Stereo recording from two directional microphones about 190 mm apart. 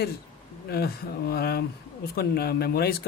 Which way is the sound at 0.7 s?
55° left (ahead or behind).